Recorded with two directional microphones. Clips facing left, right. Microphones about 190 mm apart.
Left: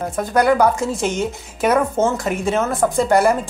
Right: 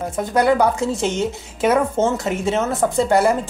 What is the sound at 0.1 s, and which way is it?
Speech, 25° right (ahead or behind).